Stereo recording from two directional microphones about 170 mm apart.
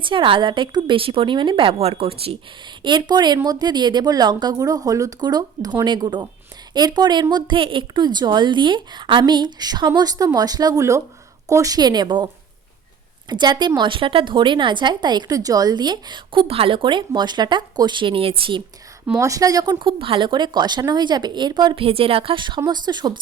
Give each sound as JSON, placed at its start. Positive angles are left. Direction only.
{"t": 0.0, "sound": "a woman's voice", "side_deg": -30}
{"t": 19.2, "sound": "a woman's voice", "side_deg": -20}